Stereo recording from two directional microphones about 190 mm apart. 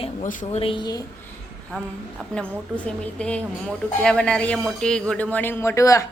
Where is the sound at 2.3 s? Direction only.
5° left (ahead or behind).